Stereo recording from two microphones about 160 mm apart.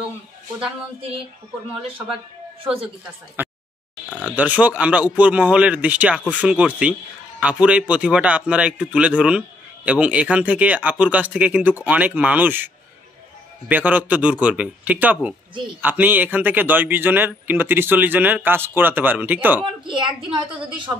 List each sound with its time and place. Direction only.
3.4 s a sound: 15° right (ahead or behind)
4.1 s speech: 5° left (ahead or behind)
4.4 s speech: 10° right (ahead or behind)
19.6 s a woman's voice: 30° right (ahead or behind)